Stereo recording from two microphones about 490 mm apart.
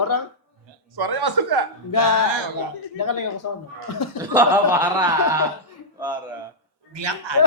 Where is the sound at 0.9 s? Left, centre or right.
Right.